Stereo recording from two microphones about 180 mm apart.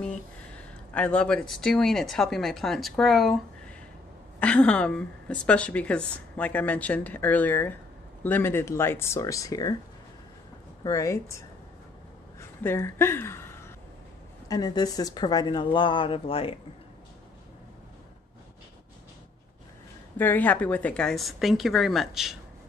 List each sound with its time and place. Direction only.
0.6 s speech: 5° left (ahead or behind)
4.4 s a woman's voice: 5° left (ahead or behind)
10.8 s a woman's voice: 20° left (ahead or behind)
14.5 s speech: 20° left (ahead or behind)
20.2 s speech: 10° left (ahead or behind)